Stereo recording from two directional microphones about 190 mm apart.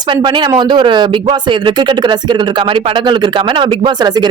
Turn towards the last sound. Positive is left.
turn(degrees=-20)  # may be behind; listen again after turning